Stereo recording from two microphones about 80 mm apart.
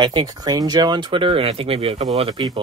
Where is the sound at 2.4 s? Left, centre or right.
Right.